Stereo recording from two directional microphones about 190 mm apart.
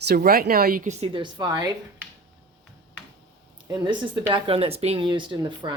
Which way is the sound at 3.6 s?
25° right (ahead or behind).